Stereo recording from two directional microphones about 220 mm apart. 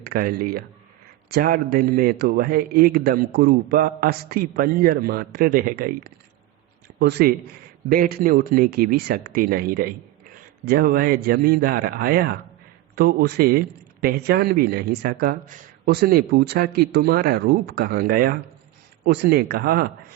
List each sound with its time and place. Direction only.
0.0 s a man's voice: 45° right (ahead or behind)